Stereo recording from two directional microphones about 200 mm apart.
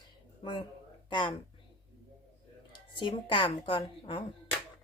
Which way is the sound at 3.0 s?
25° left (ahead or behind).